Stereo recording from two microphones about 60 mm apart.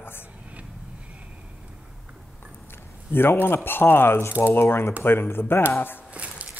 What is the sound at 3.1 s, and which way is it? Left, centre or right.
Speech, left.